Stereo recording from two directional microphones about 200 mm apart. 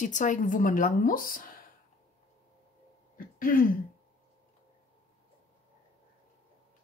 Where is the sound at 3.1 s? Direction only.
45° left (ahead or behind).